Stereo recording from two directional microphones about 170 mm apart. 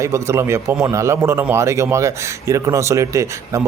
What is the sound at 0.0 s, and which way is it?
A man's voice, 15° right (ahead or behind).